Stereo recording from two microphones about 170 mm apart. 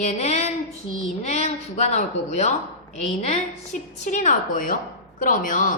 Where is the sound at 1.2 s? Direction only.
40° left (ahead or behind).